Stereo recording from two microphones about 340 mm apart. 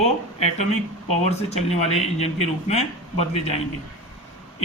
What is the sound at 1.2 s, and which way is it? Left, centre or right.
A man's voice, centre.